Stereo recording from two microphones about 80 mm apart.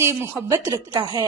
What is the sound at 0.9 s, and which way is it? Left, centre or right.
Speech, right.